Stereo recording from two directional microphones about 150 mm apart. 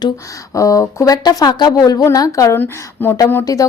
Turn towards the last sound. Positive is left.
turn(degrees=20)  # may be behind; listen again after turning